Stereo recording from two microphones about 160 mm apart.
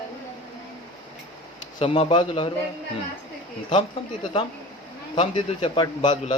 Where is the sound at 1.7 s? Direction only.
35° left (ahead or behind).